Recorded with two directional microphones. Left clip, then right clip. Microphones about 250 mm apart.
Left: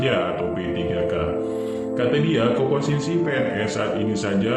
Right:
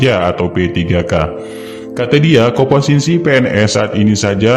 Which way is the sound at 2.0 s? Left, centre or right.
Right.